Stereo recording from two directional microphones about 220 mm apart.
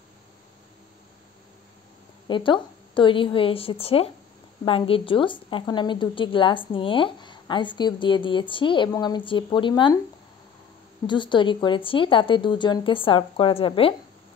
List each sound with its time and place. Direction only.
2.2 s a woman's voice: 20° left (ahead or behind)
11.1 s a woman's voice: 20° left (ahead or behind)